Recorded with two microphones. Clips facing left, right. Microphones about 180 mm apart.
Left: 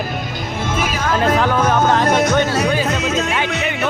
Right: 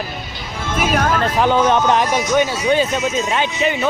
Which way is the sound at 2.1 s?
60° left (ahead or behind).